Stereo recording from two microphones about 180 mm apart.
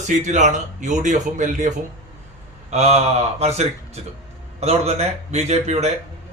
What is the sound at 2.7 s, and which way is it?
Speech, 40° right (ahead or behind).